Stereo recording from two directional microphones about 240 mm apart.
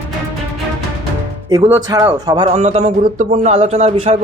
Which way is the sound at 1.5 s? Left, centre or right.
Centre.